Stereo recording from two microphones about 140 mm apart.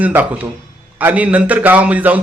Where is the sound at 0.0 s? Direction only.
10° right (ahead or behind).